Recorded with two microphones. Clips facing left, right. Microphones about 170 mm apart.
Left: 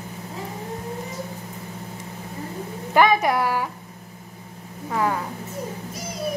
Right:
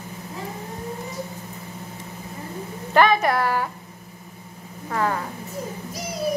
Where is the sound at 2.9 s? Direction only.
15° left (ahead or behind).